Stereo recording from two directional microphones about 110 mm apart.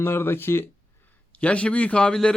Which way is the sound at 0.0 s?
20° left (ahead or behind).